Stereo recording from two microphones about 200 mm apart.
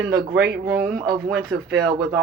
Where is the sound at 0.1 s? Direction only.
45° right (ahead or behind).